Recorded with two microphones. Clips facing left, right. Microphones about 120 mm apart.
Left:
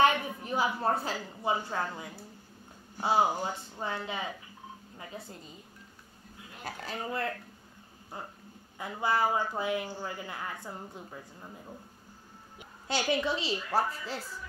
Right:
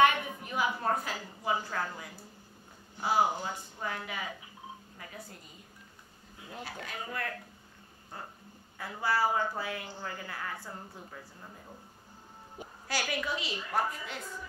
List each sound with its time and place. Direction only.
0.0 s a woman's voice: 30° left (ahead or behind)
6.6 s speech: 35° left (ahead or behind)
8.7 s speech: 20° left (ahead or behind)
12.8 s speech: 25° left (ahead or behind)